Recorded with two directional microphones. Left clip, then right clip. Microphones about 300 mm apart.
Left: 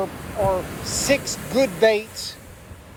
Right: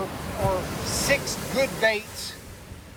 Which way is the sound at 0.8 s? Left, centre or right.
Centre.